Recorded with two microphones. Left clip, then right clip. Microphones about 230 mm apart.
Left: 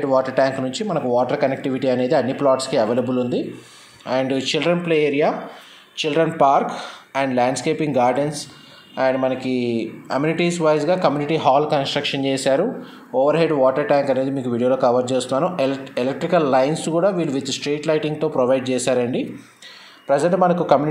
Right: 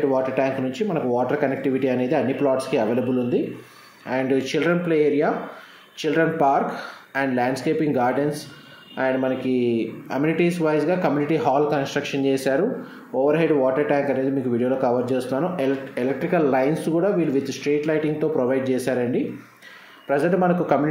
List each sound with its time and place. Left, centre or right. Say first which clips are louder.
0.1 s speech: left 4 dB; centre
0.5 s speech: left 1 dB; centre
0.8 s speech: left 4 dB; left